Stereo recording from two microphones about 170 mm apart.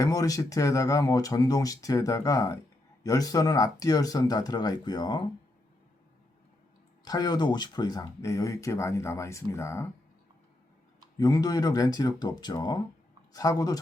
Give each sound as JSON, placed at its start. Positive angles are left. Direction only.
{"t": 0.0, "sound": "speech", "side_deg": 20}
{"t": 7.0, "sound": "speech", "side_deg": 25}
{"t": 11.2, "sound": "speech", "side_deg": 20}